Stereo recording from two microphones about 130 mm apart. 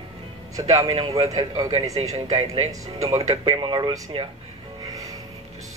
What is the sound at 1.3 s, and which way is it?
Speech, 30° right (ahead or behind).